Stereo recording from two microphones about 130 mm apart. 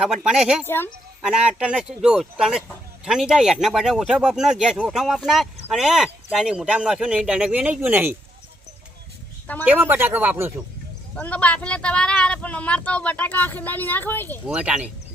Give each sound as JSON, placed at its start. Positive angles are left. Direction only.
{"t": 0.2, "sound": "speech", "side_deg": -5}
{"t": 0.6, "sound": "speech", "side_deg": 15}
{"t": 1.2, "sound": "speech", "side_deg": -5}
{"t": 9.6, "sound": "speech", "side_deg": -15}
{"t": 11.1, "sound": "speech", "side_deg": 10}
{"t": 14.4, "sound": "speech", "side_deg": -10}